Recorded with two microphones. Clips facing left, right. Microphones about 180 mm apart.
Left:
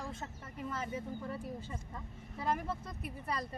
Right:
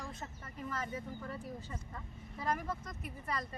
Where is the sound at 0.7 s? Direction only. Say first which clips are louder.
Left 1 dB; 25° left (ahead or behind).